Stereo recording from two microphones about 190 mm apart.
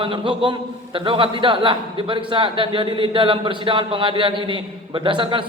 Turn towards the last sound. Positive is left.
turn(degrees=-25)  # may be behind; listen again after turning